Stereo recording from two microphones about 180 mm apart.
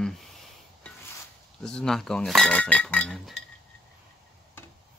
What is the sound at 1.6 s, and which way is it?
Speech, 5° left (ahead or behind).